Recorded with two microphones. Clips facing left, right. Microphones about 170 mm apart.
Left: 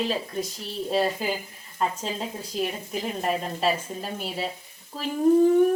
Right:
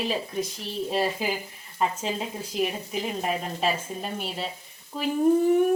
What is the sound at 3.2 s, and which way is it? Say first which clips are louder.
Speech: left 4 dB; 5° right (ahead or behind).